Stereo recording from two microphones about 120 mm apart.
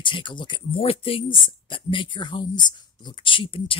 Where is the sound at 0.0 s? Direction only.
45° left (ahead or behind).